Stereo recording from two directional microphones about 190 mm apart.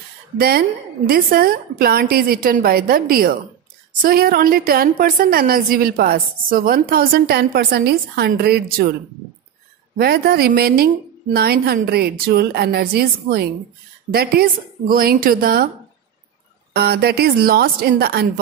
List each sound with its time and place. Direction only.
0.4 s a woman's voice: 55° right (ahead or behind)
9.9 s a woman's voice: 55° right (ahead or behind)
16.7 s a woman's voice: 55° right (ahead or behind)